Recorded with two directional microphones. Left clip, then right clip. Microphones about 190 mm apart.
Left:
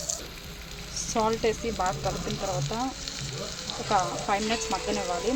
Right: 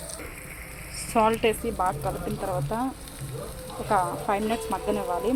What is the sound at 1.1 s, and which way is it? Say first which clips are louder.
Speech: right 4 dB; 5° left (ahead or behind).